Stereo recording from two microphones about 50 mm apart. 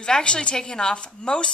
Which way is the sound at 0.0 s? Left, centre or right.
Centre.